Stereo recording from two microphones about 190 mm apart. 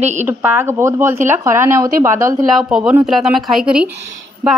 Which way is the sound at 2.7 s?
5° right (ahead or behind).